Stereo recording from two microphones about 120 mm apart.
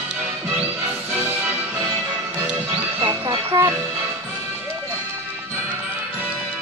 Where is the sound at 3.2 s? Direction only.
45° right (ahead or behind).